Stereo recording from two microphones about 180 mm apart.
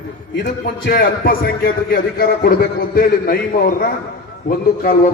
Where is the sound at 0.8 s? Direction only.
55° left (ahead or behind).